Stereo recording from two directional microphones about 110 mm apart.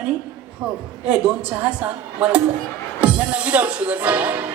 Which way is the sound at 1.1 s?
10° right (ahead or behind).